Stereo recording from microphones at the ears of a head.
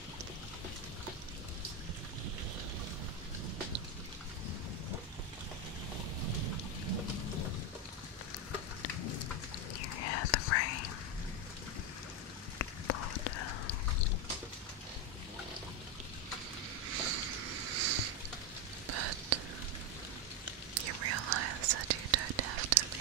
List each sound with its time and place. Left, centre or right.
6.2 s thunder: right
8.5 s whispering: left
12.5 s a sound: left
16.9 s a sound: right
18.9 s whispering: right
20.7 s whispering: right